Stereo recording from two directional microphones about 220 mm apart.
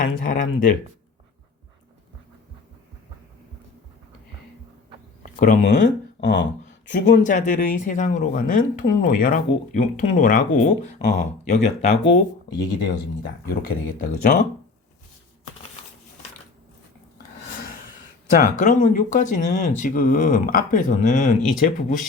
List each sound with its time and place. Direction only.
0.0 s speech: 40° left (ahead or behind)
5.2 s speech: 40° left (ahead or behind)
6.1 s a sound: 50° left (ahead or behind)
6.9 s speech: 35° left (ahead or behind)
12.5 s speech: 50° left (ahead or behind)
18.6 s speech: 35° left (ahead or behind)